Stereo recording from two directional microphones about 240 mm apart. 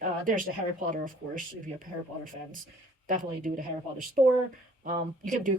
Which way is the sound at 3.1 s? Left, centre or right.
Right.